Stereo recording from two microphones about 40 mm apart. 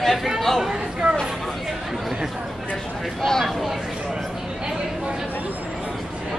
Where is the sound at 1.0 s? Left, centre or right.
Right.